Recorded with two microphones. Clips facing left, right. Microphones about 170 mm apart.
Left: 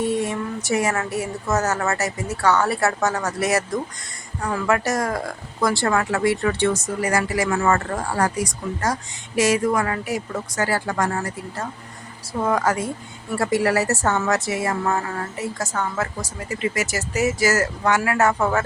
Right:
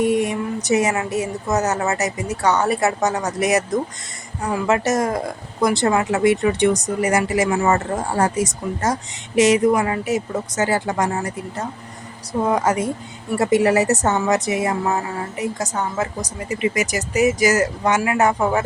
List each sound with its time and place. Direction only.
0.0 s a woman's voice: 15° right (ahead or behind)